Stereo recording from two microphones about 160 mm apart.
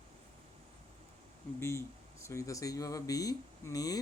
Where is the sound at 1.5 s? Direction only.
15° left (ahead or behind).